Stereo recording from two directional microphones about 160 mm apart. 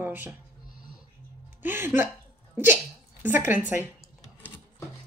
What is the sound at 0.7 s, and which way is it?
Music, 60° left (ahead or behind).